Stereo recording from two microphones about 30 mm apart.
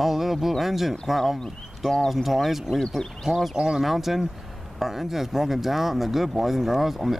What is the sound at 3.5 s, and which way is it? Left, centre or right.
Speech, right.